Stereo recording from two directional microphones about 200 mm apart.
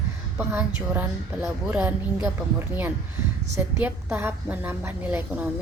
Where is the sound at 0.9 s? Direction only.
15° right (ahead or behind).